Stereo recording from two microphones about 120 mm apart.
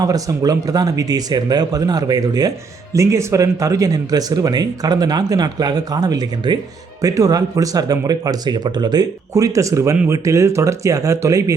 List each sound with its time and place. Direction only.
0.0 s speech: 30° right (ahead or behind)